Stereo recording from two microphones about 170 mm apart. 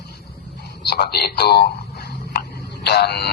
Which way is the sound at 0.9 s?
70° left (ahead or behind).